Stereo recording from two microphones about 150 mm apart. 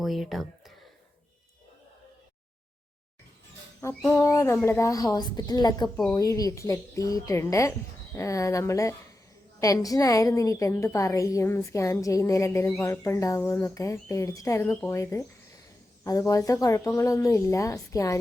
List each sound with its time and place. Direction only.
0.0 s speech: centre (ahead or behind)
3.8 s a woman's voice: 20° left (ahead or behind)